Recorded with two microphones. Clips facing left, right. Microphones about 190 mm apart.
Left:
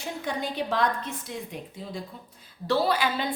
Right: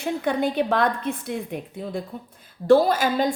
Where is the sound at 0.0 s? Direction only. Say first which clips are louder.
Right 8 dB; 60° right (ahead or behind).